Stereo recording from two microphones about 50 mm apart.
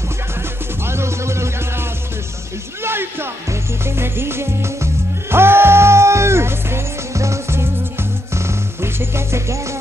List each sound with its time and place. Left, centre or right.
0.8 s music: right
2.8 s music: right